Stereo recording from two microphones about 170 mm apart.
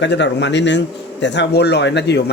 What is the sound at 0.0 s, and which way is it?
Speech, 90° left.